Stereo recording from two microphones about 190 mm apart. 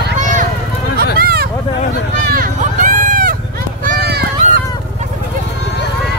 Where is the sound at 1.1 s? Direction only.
50° right (ahead or behind).